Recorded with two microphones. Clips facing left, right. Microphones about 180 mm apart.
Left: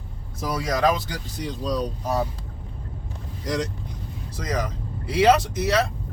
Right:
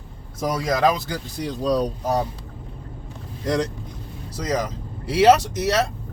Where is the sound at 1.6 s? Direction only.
60° right (ahead or behind).